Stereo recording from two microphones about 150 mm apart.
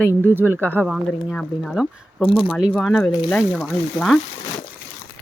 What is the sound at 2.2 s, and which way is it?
Speech, 40° left (ahead or behind).